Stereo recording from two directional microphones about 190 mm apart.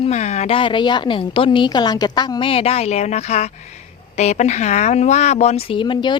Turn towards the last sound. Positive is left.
turn(degrees=25)  # may be behind; listen again after turning